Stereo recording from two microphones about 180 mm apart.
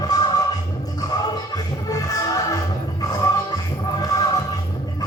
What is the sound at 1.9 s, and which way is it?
Music, 20° left (ahead or behind).